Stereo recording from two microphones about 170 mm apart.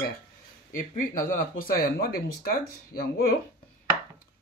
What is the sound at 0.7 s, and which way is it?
Speech, 55° left (ahead or behind).